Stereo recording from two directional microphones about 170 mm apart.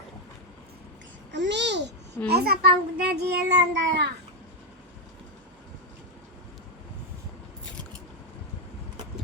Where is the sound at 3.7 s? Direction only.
90° right.